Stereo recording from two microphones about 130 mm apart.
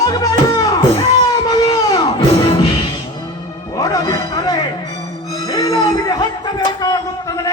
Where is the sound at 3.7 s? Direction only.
30° left (ahead or behind).